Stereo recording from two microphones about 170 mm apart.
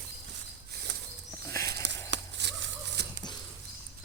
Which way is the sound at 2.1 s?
90° right.